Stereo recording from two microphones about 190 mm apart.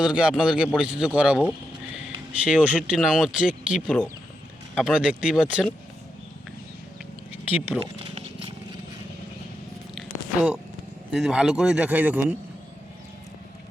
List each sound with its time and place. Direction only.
0.0 s a man's voice: 5° right (ahead or behind)
7.4 s speech: 10° right (ahead or behind)
8.1 s horse: 30° right (ahead or behind)
11.1 s a man's voice: 5° right (ahead or behind)